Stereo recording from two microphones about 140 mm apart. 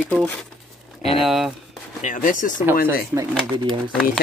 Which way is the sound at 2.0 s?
70° left (ahead or behind).